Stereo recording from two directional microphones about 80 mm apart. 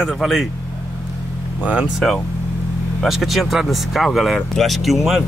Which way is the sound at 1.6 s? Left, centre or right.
Centre.